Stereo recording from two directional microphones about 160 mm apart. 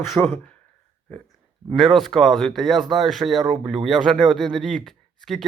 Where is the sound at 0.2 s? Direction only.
5° right (ahead or behind).